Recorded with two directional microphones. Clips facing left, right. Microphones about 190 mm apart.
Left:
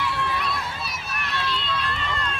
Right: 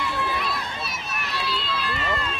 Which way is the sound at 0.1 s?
Centre (ahead or behind).